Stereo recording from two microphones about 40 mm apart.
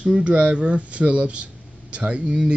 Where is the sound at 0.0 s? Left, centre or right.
Right.